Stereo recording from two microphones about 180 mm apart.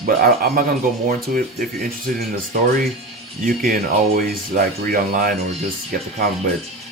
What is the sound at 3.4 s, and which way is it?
Speech, 50° right (ahead or behind).